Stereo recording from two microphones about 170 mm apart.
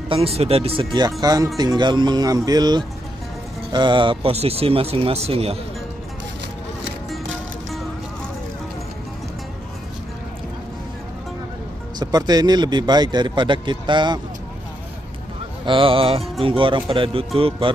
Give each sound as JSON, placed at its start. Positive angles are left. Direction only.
{"t": 0.1, "sound": "speech", "side_deg": -35}
{"t": 12.0, "sound": "speech", "side_deg": -25}
{"t": 15.6, "sound": "speech", "side_deg": -30}